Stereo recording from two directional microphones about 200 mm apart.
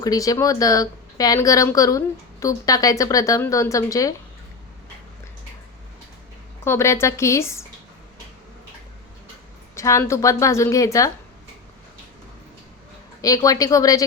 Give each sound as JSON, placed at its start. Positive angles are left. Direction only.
{"t": 0.0, "sound": "a woman's voice", "side_deg": 20}
{"t": 6.7, "sound": "a woman's voice", "side_deg": 15}
{"t": 9.7, "sound": "a woman's voice", "side_deg": 15}
{"t": 13.2, "sound": "a woman's voice", "side_deg": 15}